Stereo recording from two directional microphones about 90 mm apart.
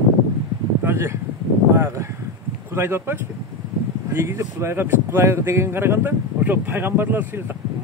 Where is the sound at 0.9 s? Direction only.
25° right (ahead or behind).